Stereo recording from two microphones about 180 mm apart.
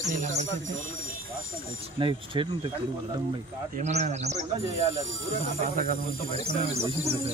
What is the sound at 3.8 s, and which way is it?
Speech, 40° right (ahead or behind).